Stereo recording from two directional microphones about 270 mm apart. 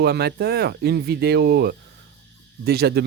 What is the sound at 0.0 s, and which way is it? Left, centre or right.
Speech, right.